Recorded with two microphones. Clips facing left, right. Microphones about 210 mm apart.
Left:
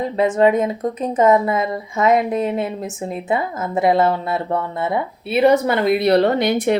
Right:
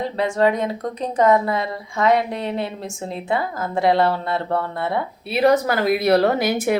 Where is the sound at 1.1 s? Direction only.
20° left (ahead or behind).